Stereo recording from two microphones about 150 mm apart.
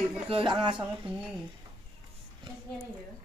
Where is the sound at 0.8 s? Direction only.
10° right (ahead or behind).